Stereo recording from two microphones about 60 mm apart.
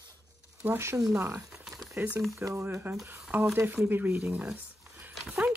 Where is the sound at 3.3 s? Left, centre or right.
Right.